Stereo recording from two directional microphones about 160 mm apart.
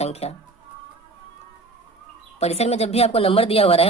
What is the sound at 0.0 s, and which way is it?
Speech, 40° left (ahead or behind).